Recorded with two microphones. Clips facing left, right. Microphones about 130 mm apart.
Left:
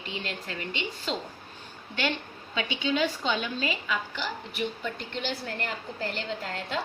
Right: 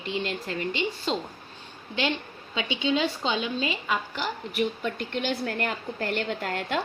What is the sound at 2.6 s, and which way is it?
Speech, 25° right (ahead or behind).